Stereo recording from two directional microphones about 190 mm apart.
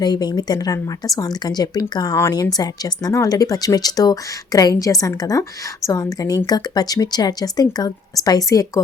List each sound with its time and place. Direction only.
0.0 s speech: 20° left (ahead or behind)